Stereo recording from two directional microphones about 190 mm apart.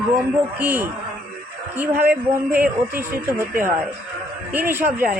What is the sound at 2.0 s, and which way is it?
Speech, 10° right (ahead or behind).